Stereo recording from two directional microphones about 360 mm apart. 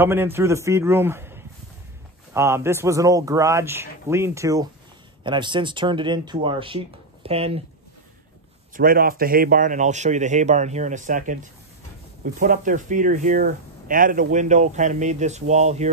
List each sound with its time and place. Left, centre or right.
0.0 s a man's voice: centre
8.7 s speech: right